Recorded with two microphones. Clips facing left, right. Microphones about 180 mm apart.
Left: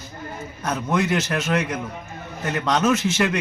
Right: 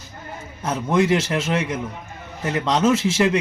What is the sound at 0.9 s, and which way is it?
A man's voice, 25° right (ahead or behind).